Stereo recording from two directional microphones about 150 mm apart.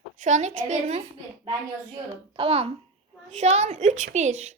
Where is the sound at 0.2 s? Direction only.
55° right (ahead or behind).